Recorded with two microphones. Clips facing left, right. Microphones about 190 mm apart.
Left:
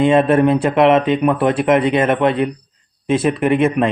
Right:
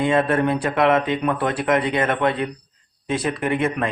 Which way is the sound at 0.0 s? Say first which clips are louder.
Left 6 dB; 20° left (ahead or behind).